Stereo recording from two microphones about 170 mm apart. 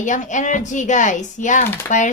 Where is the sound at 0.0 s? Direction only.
45° left (ahead or behind).